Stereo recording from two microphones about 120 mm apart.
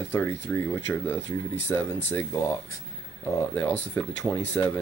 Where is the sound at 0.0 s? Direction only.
20° left (ahead or behind).